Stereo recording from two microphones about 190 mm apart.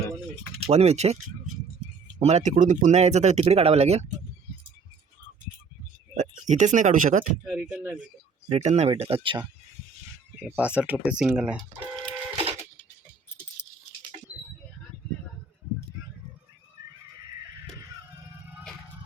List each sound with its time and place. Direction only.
0.7 s speech: 35° right (ahead or behind)
2.2 s speech: 35° right (ahead or behind)
6.4 s speech: 40° right (ahead or behind)
7.4 s speech: 5° right (ahead or behind)
8.4 s speech: 35° right (ahead or behind)
10.3 s speech: 5° right (ahead or behind)